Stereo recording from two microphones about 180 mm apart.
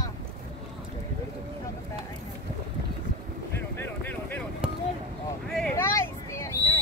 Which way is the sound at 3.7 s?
10° left (ahead or behind).